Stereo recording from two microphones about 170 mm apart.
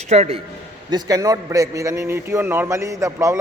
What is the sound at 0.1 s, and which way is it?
Speech, 35° right (ahead or behind).